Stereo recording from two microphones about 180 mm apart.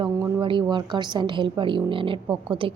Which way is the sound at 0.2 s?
15° right (ahead or behind).